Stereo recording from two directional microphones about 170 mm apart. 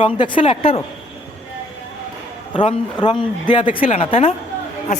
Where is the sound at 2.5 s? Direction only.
30° left (ahead or behind).